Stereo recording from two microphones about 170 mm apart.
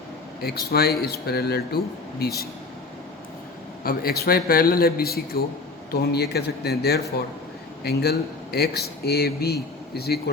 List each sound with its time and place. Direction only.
0.4 s speech: 65° left (ahead or behind)
3.8 s a man's voice: 65° left (ahead or behind)